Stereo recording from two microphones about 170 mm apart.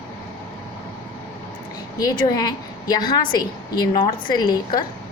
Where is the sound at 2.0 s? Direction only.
20° left (ahead or behind).